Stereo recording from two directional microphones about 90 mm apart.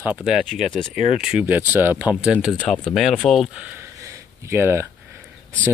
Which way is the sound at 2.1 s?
10° right (ahead or behind).